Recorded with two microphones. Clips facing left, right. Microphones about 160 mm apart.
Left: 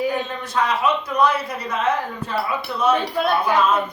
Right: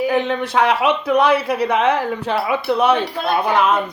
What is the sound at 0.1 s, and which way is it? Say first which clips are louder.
A woman's voice: right 7 dB; 75° right (ahead or behind).